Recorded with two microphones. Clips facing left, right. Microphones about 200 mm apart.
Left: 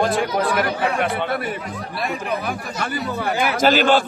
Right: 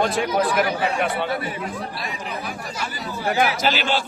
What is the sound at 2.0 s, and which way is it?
Speech, 55° left (ahead or behind).